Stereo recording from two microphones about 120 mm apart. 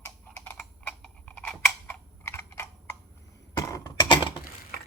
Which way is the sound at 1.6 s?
20° left (ahead or behind).